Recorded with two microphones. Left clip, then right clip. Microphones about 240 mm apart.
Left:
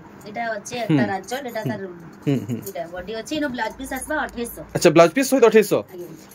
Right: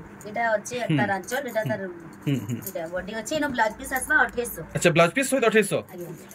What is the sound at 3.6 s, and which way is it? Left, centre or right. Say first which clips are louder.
Speech: right 3 dB; centre.